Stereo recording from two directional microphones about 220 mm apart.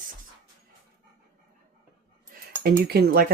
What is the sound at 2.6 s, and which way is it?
Speech, 45° right (ahead or behind).